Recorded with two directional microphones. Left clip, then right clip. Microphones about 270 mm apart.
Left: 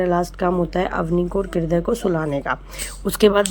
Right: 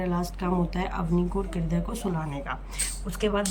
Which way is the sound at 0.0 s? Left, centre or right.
Centre.